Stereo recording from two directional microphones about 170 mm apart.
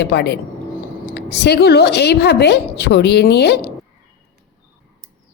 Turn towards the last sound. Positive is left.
turn(degrees=75)  # may be behind; listen again after turning